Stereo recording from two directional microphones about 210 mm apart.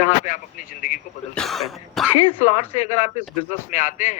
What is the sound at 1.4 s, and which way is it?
Cough, centre (ahead or behind).